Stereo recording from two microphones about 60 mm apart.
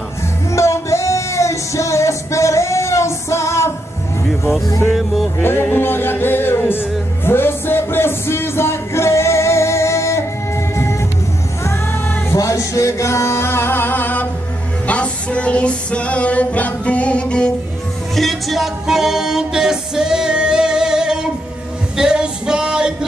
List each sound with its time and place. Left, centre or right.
0.5 s music: left
4.8 s speech: centre
5.4 s music: left
12.4 s music: left
14.9 s music: left
18.1 s music: centre